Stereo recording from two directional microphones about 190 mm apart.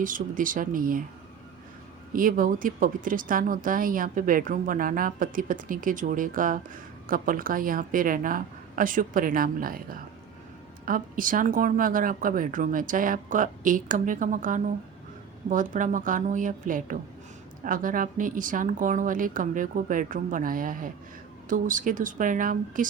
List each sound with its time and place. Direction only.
0.0 s a woman's voice: 45° right (ahead or behind)
2.1 s a woman's voice: 45° right (ahead or behind)